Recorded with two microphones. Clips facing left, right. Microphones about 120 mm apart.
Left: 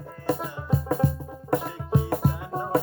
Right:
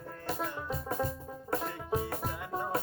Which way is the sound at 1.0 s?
65° left (ahead or behind).